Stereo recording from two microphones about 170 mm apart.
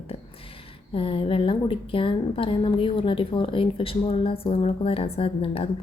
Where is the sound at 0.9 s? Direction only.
30° left (ahead or behind).